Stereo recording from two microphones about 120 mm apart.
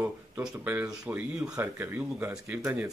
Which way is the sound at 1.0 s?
15° right (ahead or behind).